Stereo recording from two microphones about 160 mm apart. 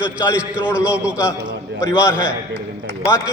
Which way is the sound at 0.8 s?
5° right (ahead or behind).